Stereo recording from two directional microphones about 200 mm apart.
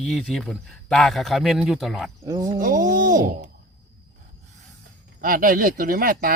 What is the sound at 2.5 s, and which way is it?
Speech, 45° right (ahead or behind).